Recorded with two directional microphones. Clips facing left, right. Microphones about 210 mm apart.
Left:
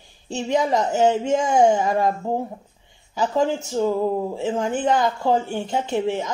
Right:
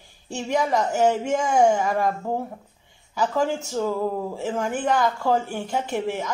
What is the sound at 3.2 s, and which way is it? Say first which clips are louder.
Speech: left 2 dB; 25° left (ahead or behind).